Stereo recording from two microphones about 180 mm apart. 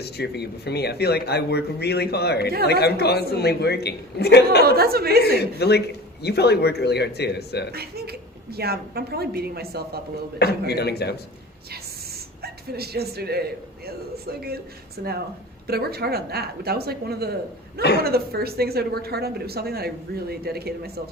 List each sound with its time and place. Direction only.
0.0 s speech: 65° left (ahead or behind)
4.6 s a woman's voice: 60° right (ahead or behind)
5.4 s speech: 65° left (ahead or behind)
7.7 s a woman's voice: 60° right (ahead or behind)
10.7 s speech: 65° left (ahead or behind)
12.4 s a woman's voice: 60° right (ahead or behind)